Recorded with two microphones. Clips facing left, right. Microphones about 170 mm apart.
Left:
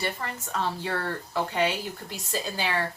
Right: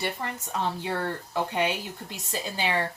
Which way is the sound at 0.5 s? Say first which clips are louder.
Even; 15° right (ahead or behind).